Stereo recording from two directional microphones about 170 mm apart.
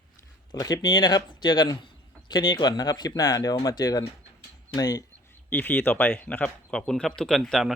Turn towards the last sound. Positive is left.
turn(degrees=0)  # may be behind; listen again after turning